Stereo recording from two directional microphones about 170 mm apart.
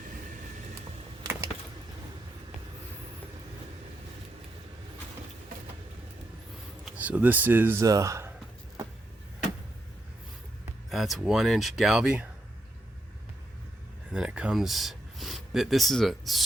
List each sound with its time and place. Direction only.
1.2 s a sound: 15° right (ahead or behind)
6.8 s speech: 10° right (ahead or behind)
10.8 s speech: centre (ahead or behind)
14.1 s speech: 5° right (ahead or behind)